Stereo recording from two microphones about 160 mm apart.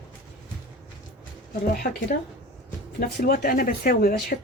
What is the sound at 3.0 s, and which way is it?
Speech, 65° left (ahead or behind).